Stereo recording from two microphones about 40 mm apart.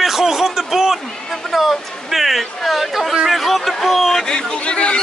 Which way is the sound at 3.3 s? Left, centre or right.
Centre.